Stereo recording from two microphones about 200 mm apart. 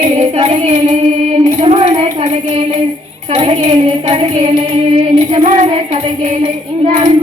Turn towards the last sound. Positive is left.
turn(degrees=-25)  # may be behind; listen again after turning